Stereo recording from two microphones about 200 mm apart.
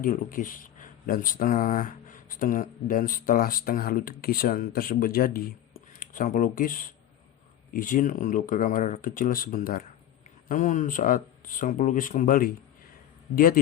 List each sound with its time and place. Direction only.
0.0 s speech: 40° left (ahead or behind)